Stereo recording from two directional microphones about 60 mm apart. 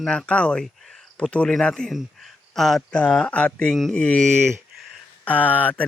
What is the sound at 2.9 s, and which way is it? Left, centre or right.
Speech, centre.